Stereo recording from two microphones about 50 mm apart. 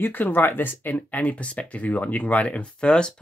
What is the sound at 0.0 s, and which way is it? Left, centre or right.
Speech, left.